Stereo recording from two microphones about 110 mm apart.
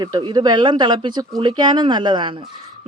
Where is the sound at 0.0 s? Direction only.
40° right (ahead or behind).